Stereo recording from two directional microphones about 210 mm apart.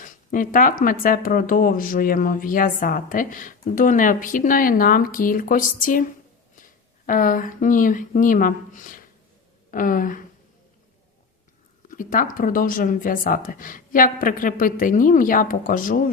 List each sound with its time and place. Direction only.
0.0 s speech: 40° left (ahead or behind)
11.9 s speech: 40° left (ahead or behind)